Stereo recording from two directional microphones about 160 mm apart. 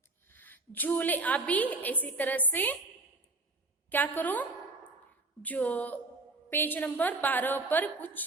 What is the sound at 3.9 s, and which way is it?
A woman's voice, 10° left (ahead or behind).